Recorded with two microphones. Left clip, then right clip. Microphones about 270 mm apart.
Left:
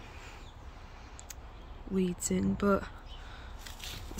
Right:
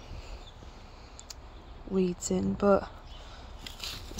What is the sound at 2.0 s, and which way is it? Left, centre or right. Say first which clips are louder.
Speech: right 4 dB; left.